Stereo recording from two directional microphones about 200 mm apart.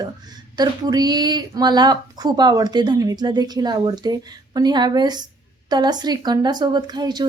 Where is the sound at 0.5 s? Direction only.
20° right (ahead or behind).